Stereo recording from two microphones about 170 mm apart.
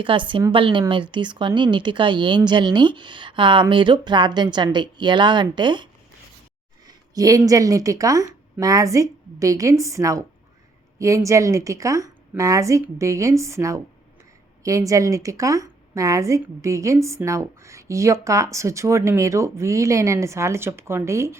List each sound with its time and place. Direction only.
0.0 s speech: 30° right (ahead or behind)